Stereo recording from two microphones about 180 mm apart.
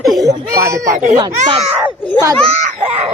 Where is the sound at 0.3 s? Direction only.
15° right (ahead or behind).